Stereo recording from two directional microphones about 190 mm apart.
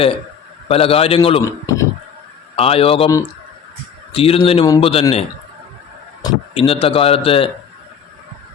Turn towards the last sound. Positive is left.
turn(degrees=30)  # may be behind; listen again after turning